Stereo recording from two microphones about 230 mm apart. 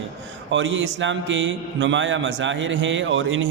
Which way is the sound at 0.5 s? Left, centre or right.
Right.